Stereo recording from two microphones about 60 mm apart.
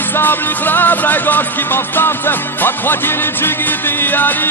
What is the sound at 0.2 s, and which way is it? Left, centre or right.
Music, left.